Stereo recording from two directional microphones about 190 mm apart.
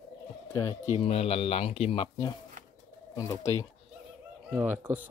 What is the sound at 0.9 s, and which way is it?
Speech, 30° left (ahead or behind).